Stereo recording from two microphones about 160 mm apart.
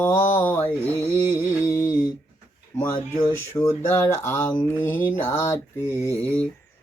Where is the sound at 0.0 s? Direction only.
15° left (ahead or behind).